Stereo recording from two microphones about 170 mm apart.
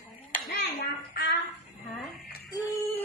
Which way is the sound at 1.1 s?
90° left.